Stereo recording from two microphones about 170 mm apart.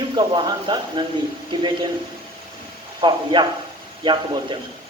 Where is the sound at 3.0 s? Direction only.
25° right (ahead or behind).